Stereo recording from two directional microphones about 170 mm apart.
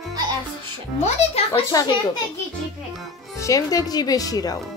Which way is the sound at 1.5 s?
20° left (ahead or behind).